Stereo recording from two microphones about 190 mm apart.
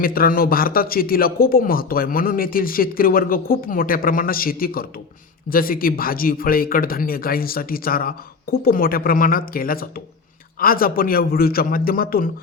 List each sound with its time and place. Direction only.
0.0 s a man's voice: 50° left (ahead or behind)